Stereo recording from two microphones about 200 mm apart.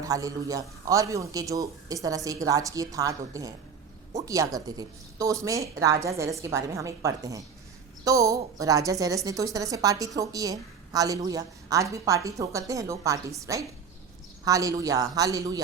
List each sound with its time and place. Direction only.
0.0 s a woman's voice: 15° right (ahead or behind)